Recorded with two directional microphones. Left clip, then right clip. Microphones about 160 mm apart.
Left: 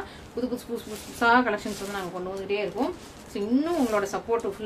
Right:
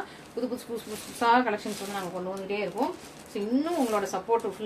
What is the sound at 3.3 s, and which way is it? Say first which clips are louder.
Speech: left 2 dB; 25° left (ahead or behind).